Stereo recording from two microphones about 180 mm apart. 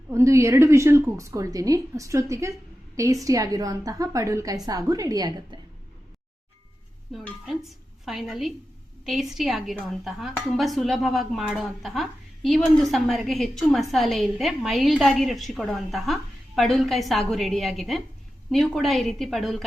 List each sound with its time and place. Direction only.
0.1 s a woman's voice: 15° right (ahead or behind)
7.1 s speech: centre (ahead or behind)